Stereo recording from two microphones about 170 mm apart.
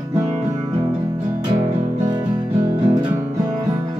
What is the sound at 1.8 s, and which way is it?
Music, 45° right (ahead or behind).